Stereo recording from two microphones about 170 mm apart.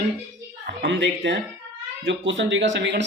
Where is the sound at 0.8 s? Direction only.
90° right.